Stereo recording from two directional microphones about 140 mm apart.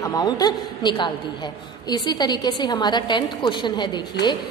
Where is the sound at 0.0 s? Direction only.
25° left (ahead or behind).